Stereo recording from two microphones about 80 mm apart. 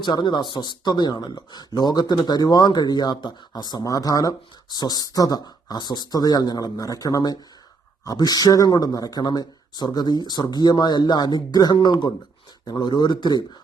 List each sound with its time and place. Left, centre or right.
0.0 s speech: left